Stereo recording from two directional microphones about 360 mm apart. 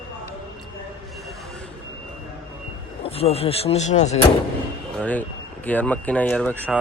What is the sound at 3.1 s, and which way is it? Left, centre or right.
Speech, centre.